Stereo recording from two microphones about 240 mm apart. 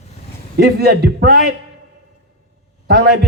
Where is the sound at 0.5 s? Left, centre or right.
Right.